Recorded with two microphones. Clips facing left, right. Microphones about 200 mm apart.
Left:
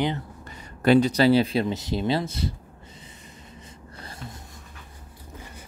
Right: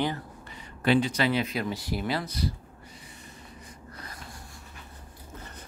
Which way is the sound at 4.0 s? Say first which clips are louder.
Left 6 dB; 30° left (ahead or behind).